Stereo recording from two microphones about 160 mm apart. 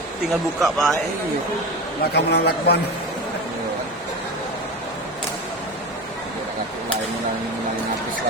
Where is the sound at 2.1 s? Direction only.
90° left.